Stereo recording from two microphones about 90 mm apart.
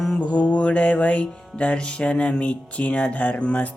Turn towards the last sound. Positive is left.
turn(degrees=15)  # may be behind; listen again after turning